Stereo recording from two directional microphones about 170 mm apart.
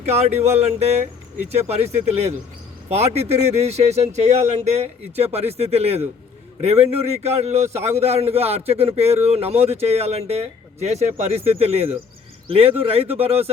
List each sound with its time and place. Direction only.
0.0 s a man's voice: 40° right (ahead or behind)